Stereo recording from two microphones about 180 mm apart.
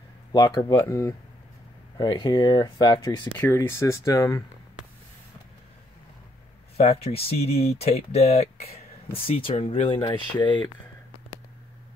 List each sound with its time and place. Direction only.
0.3 s speech: 20° left (ahead or behind)
3.3 s speech: 10° left (ahead or behind)
6.8 s speech: 35° left (ahead or behind)